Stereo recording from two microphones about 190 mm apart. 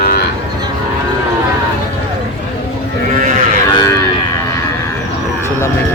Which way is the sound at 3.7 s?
20° left (ahead or behind).